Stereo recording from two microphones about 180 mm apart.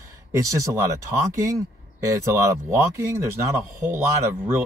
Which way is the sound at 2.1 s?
15° right (ahead or behind).